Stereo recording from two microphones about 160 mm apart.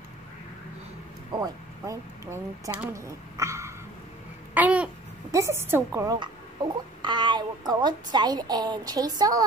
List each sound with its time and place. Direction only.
1.4 s a woman's voice: 20° right (ahead or behind)
4.6 s babbling: 10° right (ahead or behind)
5.3 s a woman's voice: 15° right (ahead or behind)
7.0 s a woman's voice: 30° right (ahead or behind)